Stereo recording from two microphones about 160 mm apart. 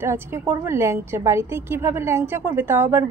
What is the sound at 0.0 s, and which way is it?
A woman's voice, 15° right (ahead or behind).